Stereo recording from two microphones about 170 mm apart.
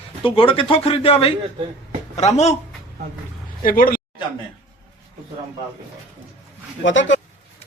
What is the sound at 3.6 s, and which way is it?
Speech, 55° left (ahead or behind).